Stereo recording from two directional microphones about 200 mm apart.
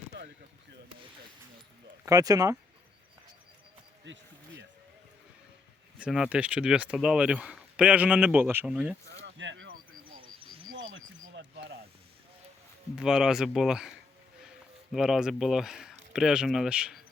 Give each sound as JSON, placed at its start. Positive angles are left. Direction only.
{"t": 0.1, "sound": "basketball bounce", "side_deg": -60}
{"t": 2.0, "sound": "speech", "side_deg": -20}
{"t": 4.0, "sound": "basketball bounce", "side_deg": -65}
{"t": 6.0, "sound": "speech", "side_deg": -5}
{"t": 9.2, "sound": "a sound", "side_deg": -65}
{"t": 10.8, "sound": "a sound", "side_deg": -70}
{"t": 13.0, "sound": "speech", "side_deg": -5}
{"t": 14.9, "sound": "speech", "side_deg": -5}